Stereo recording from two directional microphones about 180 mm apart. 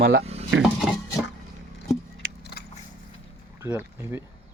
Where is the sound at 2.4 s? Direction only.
65° left (ahead or behind).